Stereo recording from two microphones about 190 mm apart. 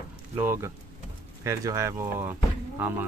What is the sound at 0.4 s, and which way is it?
Speech, 10° right (ahead or behind).